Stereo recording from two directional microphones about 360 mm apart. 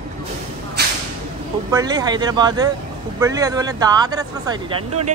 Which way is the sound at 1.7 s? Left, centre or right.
Centre.